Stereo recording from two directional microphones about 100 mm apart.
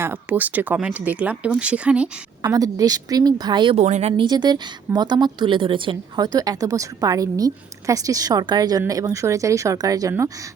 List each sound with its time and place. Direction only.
0.0 s speech: 20° right (ahead or behind)
2.4 s a woman's voice: 35° right (ahead or behind); by 6.0 s 60° right (ahead or behind)
6.1 s a woman's voice: 40° right (ahead or behind)